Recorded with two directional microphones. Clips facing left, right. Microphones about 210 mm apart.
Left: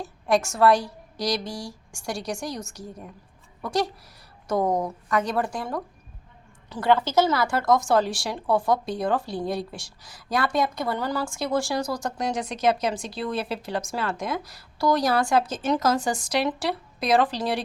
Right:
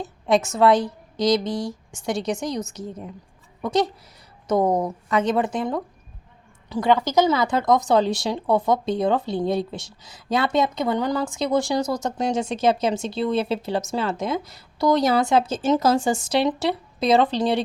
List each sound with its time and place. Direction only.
0.0 s speech: 20° right (ahead or behind)